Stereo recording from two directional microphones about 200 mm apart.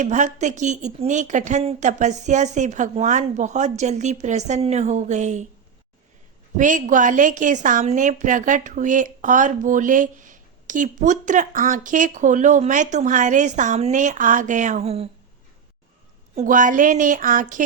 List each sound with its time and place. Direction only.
0.0 s a woman's voice: 35° right (ahead or behind)
6.6 s a woman's voice: 40° right (ahead or behind)
16.3 s a woman's voice: 40° right (ahead or behind)